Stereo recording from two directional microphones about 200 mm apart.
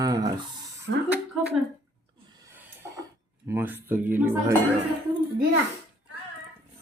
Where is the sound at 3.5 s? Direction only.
10° right (ahead or behind).